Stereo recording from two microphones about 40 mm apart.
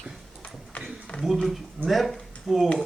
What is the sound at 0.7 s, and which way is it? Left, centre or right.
Run, left.